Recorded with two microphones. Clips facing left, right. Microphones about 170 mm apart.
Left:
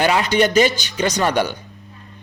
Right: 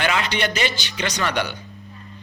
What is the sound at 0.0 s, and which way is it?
A man's voice, 40° left (ahead or behind).